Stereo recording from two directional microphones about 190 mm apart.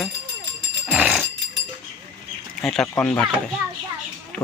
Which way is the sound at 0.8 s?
5° right (ahead or behind).